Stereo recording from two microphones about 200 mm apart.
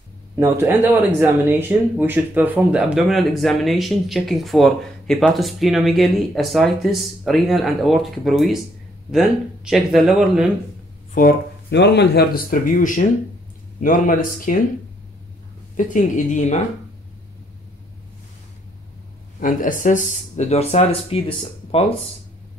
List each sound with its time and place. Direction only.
0.4 s speech: 10° right (ahead or behind)
11.1 s speech: 55° left (ahead or behind)
15.7 s speech: 40° left (ahead or behind)
19.4 s speech: 40° left (ahead or behind)